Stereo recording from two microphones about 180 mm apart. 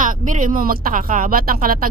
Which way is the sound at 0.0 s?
45° right (ahead or behind).